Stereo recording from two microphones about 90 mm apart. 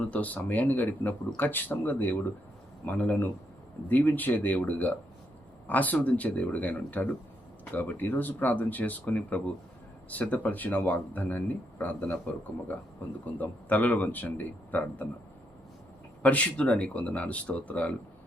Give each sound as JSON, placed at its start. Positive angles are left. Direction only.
{"t": 0.0, "sound": "speech", "side_deg": 15}
{"t": 16.2, "sound": "speech", "side_deg": 15}